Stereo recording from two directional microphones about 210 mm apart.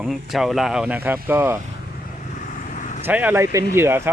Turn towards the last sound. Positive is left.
turn(degrees=-10)  # may be behind; listen again after turning